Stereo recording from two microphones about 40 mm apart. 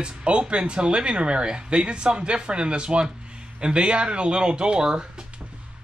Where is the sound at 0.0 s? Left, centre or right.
Right.